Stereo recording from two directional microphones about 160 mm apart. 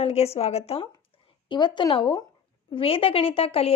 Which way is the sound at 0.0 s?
40° left (ahead or behind).